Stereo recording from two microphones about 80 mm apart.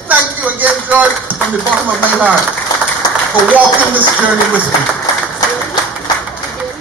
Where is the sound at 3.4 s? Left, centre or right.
Centre.